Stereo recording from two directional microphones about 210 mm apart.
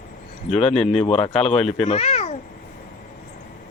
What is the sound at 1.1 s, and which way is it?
A woman's voice, 25° left (ahead or behind).